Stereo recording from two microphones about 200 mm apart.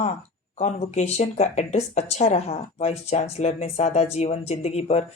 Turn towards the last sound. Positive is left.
turn(degrees=30)  # may be behind; listen again after turning